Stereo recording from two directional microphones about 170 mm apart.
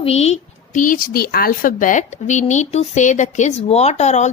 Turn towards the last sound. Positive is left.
turn(degrees=40)  # may be behind; listen again after turning